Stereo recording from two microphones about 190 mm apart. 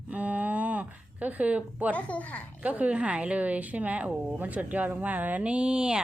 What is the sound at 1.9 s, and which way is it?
Speech, 5° left (ahead or behind).